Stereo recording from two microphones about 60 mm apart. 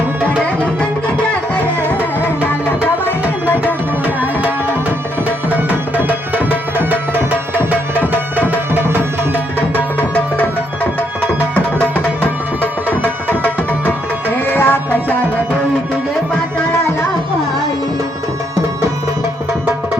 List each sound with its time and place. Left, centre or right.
1.9 s music: left
4.0 s tabla: right
6.0 s tabla: right
9.6 s music: left
13.2 s tabla: left